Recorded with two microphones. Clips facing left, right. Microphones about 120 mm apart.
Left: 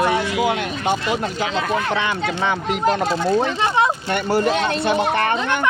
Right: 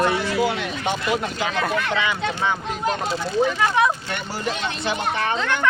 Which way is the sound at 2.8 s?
45° left (ahead or behind).